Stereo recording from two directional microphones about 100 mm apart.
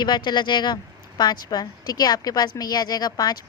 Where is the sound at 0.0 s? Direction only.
45° left (ahead or behind).